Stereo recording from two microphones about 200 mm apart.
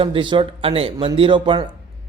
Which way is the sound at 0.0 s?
25° right (ahead or behind).